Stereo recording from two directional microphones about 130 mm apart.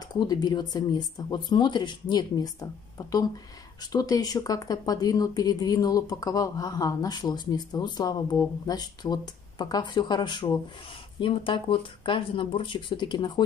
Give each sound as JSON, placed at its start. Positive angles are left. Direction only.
{"t": 0.1, "sound": "speech", "side_deg": 35}